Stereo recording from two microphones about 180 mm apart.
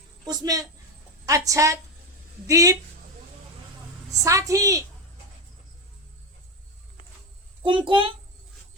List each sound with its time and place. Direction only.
0.3 s a child's voice: 20° right (ahead or behind)
4.2 s a woman's voice: 15° right (ahead or behind)
7.6 s a child's voice: 30° right (ahead or behind)